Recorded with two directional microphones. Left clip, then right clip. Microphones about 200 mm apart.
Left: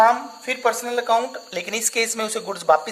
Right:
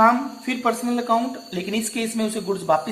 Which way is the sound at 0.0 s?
55° left (ahead or behind).